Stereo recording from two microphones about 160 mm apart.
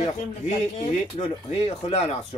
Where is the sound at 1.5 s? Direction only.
40° left (ahead or behind).